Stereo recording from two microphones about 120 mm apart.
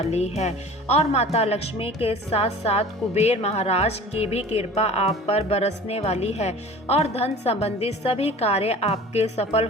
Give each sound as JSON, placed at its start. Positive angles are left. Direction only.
{"t": 0.0, "sound": "speech", "side_deg": 65}